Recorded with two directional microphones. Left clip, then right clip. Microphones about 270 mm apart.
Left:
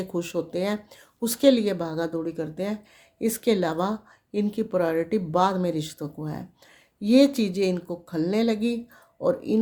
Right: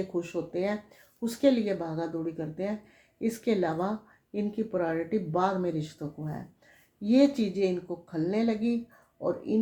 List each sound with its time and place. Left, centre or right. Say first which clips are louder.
0.1 s speech: left 4 dB; left